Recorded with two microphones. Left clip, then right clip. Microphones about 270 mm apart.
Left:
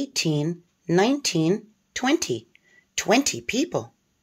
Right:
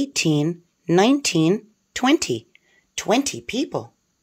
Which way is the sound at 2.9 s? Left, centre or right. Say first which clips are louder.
Even; centre.